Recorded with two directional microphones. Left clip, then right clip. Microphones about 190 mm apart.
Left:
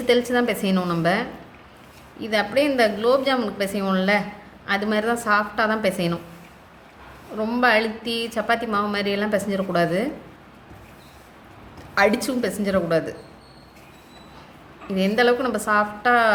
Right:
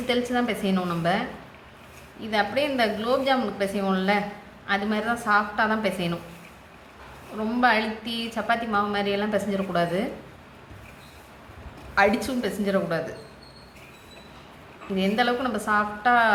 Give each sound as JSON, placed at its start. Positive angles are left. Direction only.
{"t": 0.1, "sound": "a woman's voice", "side_deg": 60}
{"t": 2.3, "sound": "a woman's voice", "side_deg": 65}
{"t": 7.6, "sound": "a woman's voice", "side_deg": 65}
{"t": 11.9, "sound": "a woman's voice", "side_deg": 65}
{"t": 14.9, "sound": "a woman's voice", "side_deg": 65}